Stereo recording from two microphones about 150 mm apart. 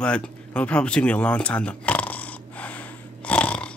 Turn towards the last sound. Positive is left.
turn(degrees=10)  # may be behind; listen again after turning